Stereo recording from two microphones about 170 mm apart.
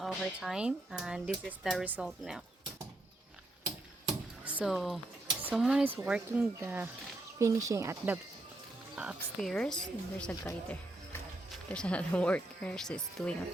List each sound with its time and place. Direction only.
0.0 s speech: centre (ahead or behind)
4.4 s speech: 5° right (ahead or behind)
9.0 s speech: centre (ahead or behind)
10.4 s music: 15° left (ahead or behind)
11.7 s speech: 5° left (ahead or behind)